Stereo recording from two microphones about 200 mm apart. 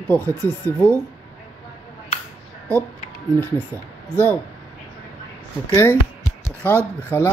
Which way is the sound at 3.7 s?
15° right (ahead or behind).